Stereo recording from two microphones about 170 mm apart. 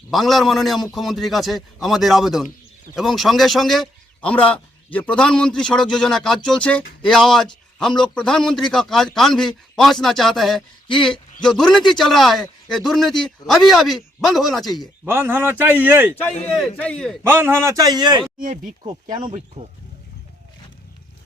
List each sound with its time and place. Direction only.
0.1 s a man's voice: centre (ahead or behind)
15.0 s a man's voice: 15° right (ahead or behind)
16.6 s a man's voice: 5° left (ahead or behind)
17.2 s a man's voice: 15° right (ahead or behind)
18.3 s speech: 55° right (ahead or behind)